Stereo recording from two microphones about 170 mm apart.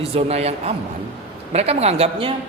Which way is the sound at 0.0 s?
35° right (ahead or behind).